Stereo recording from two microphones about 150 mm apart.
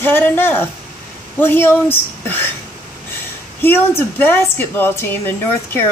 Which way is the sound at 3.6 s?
15° left (ahead or behind).